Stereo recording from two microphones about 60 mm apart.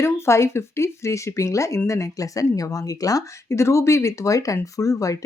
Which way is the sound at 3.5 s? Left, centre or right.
Left.